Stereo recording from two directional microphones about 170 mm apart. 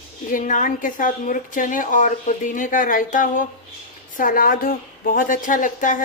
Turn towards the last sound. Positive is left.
turn(degrees=50)  # may be behind; listen again after turning